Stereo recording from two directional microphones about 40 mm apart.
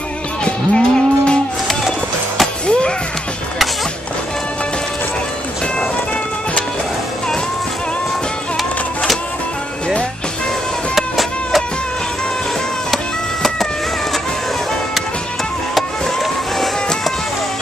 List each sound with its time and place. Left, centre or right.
0.5 s moo: left
2.6 s music: left
11.0 s a sound: centre
12.9 s music: centre
15.7 s music: centre